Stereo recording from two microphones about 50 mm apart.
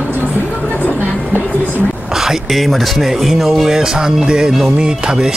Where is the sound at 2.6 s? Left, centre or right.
Centre.